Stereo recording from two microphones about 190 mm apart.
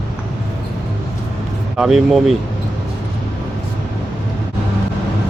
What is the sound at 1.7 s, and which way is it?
Speech, centre (ahead or behind).